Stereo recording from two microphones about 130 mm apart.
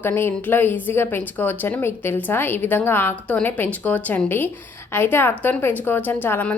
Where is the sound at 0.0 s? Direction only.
15° left (ahead or behind).